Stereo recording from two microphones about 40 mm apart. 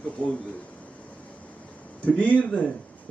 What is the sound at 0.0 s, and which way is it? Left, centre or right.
Speech, left.